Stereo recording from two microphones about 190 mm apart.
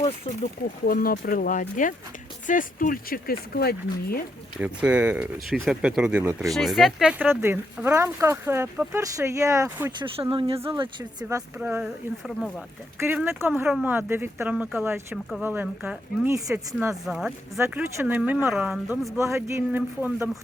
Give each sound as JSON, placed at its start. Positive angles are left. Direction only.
{"t": 0.9, "sound": "speech", "side_deg": 50}
{"t": 4.6, "sound": "speech", "side_deg": -5}
{"t": 10.0, "sound": "speech", "side_deg": -25}
{"t": 13.0, "sound": "speech", "side_deg": -10}
{"t": 16.9, "sound": "speech", "side_deg": -5}